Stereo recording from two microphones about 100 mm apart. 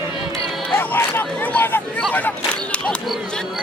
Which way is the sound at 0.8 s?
20° left (ahead or behind).